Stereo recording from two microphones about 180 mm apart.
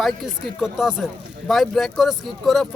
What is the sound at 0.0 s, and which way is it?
Speech, centre (ahead or behind).